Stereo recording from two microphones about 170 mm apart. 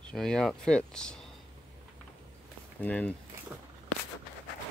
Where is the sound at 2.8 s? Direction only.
5° left (ahead or behind).